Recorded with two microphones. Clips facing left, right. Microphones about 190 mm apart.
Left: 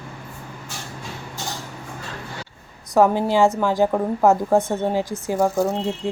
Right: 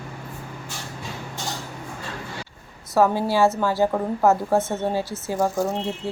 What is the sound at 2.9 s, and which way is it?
A woman's voice, 15° left (ahead or behind).